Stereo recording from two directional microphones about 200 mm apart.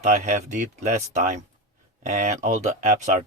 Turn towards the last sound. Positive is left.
turn(degrees=-35)  # may be behind; listen again after turning